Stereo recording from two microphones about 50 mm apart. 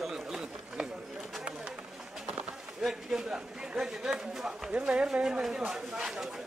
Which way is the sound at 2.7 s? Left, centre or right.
Centre.